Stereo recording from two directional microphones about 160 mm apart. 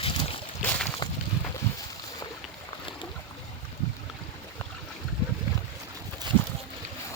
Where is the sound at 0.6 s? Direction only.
10° left (ahead or behind).